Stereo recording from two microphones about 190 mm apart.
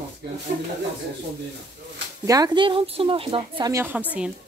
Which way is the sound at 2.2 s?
20° right (ahead or behind).